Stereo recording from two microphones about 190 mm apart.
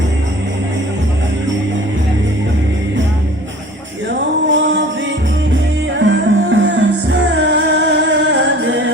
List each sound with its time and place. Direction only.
4.4 s music: 75° right (ahead or behind)
6.1 s music: 75° right (ahead or behind)